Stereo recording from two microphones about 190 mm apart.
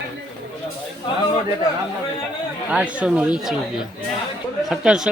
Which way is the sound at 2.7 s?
5° right (ahead or behind).